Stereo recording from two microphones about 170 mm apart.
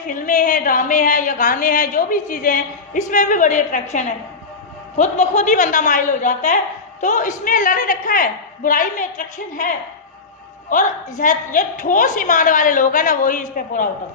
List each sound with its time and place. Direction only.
0.1 s a woman's voice: 50° left (ahead or behind)
11.2 s a woman's voice: 50° left (ahead or behind)